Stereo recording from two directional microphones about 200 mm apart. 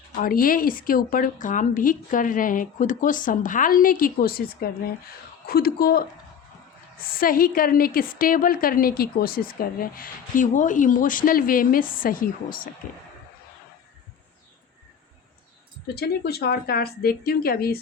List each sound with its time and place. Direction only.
0.2 s a woman's voice: 45° left (ahead or behind)
16.0 s a woman's voice: 50° left (ahead or behind)